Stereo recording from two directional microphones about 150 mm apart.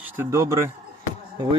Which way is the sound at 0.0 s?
15° right (ahead or behind).